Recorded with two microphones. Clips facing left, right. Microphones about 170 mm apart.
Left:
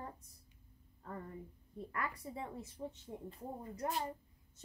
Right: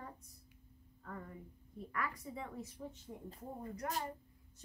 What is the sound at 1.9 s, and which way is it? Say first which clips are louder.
Speech: even; 30° left (ahead or behind).